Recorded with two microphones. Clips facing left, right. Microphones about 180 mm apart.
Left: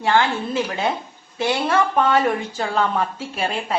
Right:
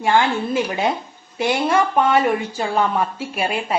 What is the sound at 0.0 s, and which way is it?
A woman's voice, 15° right (ahead or behind).